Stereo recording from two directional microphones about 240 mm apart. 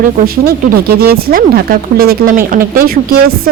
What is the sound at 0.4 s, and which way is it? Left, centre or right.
A woman's voice, right.